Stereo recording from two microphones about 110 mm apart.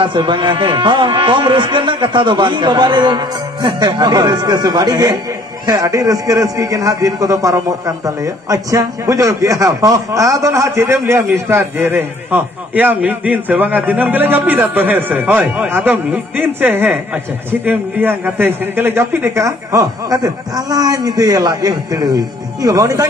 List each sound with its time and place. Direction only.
0.0 s a man's voice: 45° right (ahead or behind)